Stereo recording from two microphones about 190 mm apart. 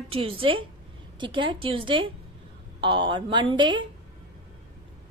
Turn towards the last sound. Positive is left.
turn(degrees=-25)  # may be behind; listen again after turning